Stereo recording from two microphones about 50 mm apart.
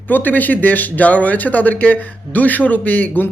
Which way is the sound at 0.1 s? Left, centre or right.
Left.